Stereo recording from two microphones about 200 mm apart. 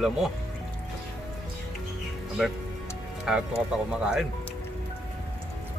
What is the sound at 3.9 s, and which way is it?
Speech, 5° right (ahead or behind).